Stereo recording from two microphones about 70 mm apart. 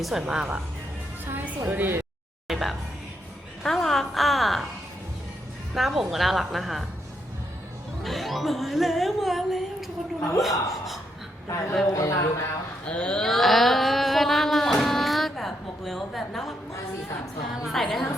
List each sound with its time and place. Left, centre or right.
0.0 s a woman's voice: centre
1.2 s a sound: right
2.5 s a woman's voice: centre
5.7 s a woman's voice: centre
8.0 s speech: centre
10.2 s speech: left
11.9 s speech: left
12.8 s a sound: centre
17.5 s a woman's voice: centre